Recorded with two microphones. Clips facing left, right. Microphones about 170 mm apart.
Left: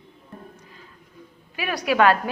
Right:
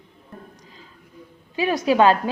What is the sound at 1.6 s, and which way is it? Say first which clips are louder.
Speech: right 3 dB; 25° right (ahead or behind).